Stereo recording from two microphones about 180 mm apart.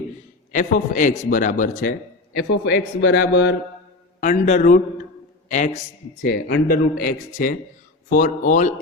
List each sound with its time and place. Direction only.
0.5 s a man's voice: 45° left (ahead or behind)
2.5 s a man's voice: 75° left (ahead or behind)
4.2 s a man's voice: 45° left (ahead or behind)
6.2 s a man's voice: 55° left (ahead or behind)